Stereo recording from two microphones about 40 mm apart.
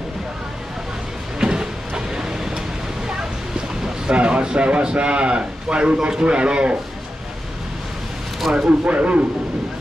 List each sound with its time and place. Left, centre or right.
1.4 s a sound: centre
4.1 s a man's voice: right
8.4 s speech: centre
8.6 s speech: right